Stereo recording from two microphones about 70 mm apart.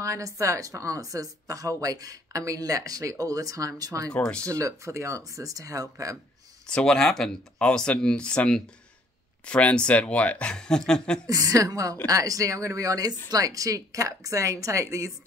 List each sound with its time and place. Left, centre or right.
0.0 s speech: right
6.7 s speech: centre
11.2 s speech: right